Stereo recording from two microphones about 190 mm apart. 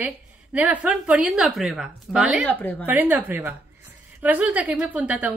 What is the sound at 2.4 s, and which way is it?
Speech, 10° left (ahead or behind).